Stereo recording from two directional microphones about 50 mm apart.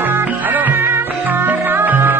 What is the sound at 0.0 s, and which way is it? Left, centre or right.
Music, right.